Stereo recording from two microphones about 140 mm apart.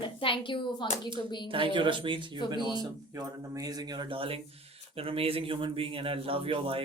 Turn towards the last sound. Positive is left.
turn(degrees=-40)  # may be behind; listen again after turning